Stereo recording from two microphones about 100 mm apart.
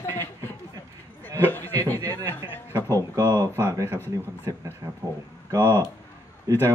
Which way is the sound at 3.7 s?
25° right (ahead or behind).